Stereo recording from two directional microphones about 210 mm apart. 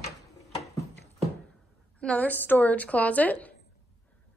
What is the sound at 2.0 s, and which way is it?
A woman's voice, 5° left (ahead or behind).